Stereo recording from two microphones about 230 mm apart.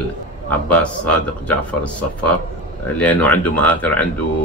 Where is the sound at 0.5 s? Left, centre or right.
Centre.